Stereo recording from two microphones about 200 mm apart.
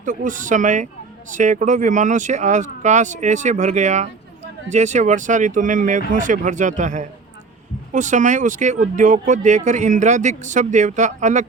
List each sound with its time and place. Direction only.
0.0 s speech: 40° right (ahead or behind)